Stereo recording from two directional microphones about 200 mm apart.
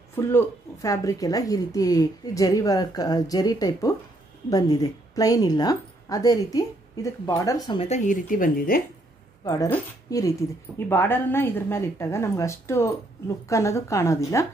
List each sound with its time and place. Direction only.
0.1 s a woman's voice: 10° left (ahead or behind); by 8.8 s 45° left (ahead or behind)
9.4 s speech: 20° left (ahead or behind)